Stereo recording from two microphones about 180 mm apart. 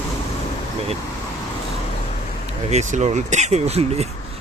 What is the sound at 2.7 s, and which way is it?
Speech, 40° right (ahead or behind).